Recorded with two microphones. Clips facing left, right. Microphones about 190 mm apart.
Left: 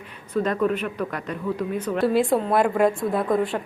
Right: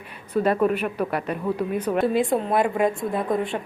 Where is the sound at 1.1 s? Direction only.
10° right (ahead or behind).